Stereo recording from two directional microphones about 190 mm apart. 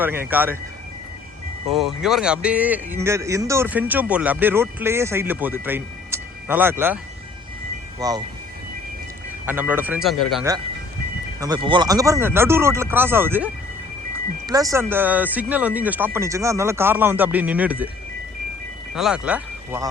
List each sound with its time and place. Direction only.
0.0 s speech: 10° right (ahead or behind)
1.7 s speech: centre (ahead or behind); by 8.2 s 20° right (ahead or behind)
9.5 s speech: 10° right (ahead or behind)
11.3 s speech: 20° right (ahead or behind)
18.9 s speech: 5° right (ahead or behind)